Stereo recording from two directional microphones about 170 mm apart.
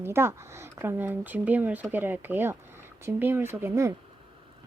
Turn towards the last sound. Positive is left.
turn(degrees=-15)  # may be behind; listen again after turning